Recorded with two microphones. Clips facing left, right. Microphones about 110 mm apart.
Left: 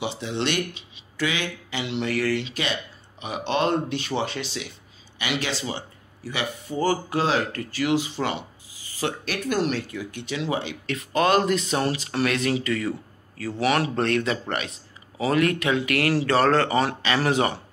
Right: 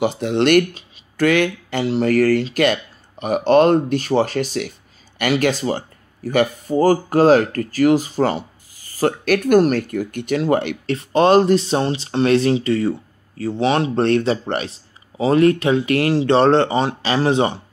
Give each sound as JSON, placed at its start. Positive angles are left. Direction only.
{"t": 0.0, "sound": "speech", "side_deg": -50}
{"t": 10.9, "sound": "speech", "side_deg": -30}